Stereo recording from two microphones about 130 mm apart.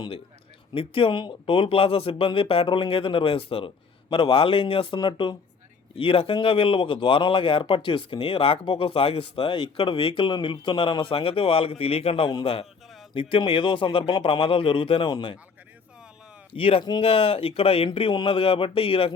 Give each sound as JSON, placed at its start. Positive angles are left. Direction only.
{"t": 0.7, "sound": "a man's voice", "side_deg": 45}
{"t": 16.5, "sound": "a man's voice", "side_deg": 45}